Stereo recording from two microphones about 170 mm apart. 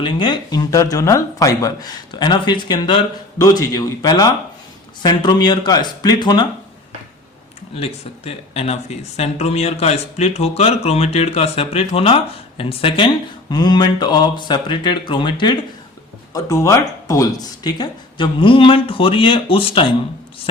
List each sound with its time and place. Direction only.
0.2 s speech: 25° left (ahead or behind)
7.8 s speech: 35° left (ahead or behind)